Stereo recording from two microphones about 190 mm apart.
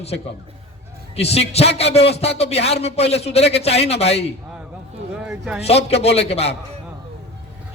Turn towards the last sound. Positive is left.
turn(degrees=35)  # may be behind; listen again after turning